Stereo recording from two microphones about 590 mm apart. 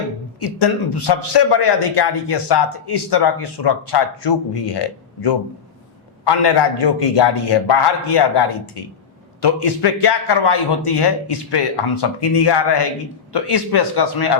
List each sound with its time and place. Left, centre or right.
0.3 s a man's voice: left
6.2 s a man's voice: left